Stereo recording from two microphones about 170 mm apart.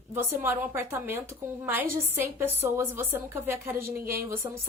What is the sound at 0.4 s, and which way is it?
A woman's voice, 15° right (ahead or behind).